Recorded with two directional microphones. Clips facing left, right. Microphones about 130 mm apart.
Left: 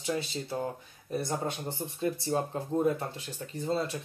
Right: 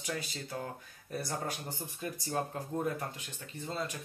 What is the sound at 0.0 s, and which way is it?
Speech, 25° left (ahead or behind).